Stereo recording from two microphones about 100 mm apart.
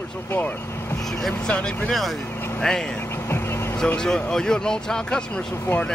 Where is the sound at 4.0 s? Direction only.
5° left (ahead or behind).